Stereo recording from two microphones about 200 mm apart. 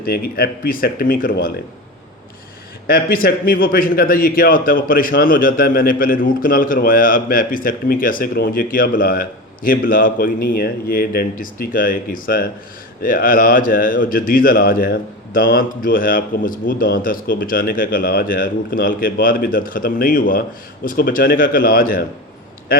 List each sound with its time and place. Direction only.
0.0 s speech: 50° left (ahead or behind)
2.8 s speech: 45° left (ahead or behind)